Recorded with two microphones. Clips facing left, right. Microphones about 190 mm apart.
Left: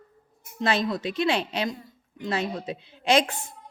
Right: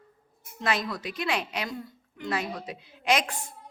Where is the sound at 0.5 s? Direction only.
25° left (ahead or behind).